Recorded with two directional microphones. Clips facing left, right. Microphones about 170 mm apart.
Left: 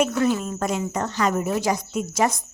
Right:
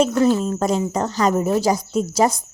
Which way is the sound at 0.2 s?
30° right (ahead or behind).